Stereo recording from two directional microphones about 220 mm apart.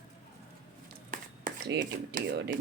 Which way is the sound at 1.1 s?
40° right (ahead or behind).